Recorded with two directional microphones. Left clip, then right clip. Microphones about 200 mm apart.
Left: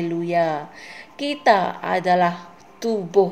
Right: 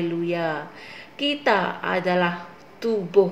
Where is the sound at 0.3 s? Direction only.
45° left (ahead or behind).